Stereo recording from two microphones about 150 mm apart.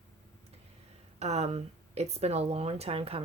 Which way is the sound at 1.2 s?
45° right (ahead or behind).